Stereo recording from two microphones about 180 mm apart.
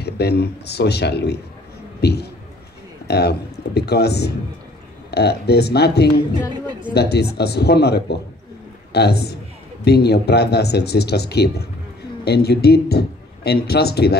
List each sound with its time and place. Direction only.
0.0 s a man's voice: 65° left (ahead or behind)